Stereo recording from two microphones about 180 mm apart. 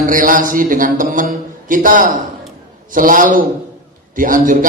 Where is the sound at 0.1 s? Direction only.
50° right (ahead or behind).